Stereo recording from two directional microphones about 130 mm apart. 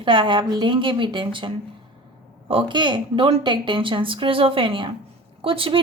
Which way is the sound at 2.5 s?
35° right (ahead or behind).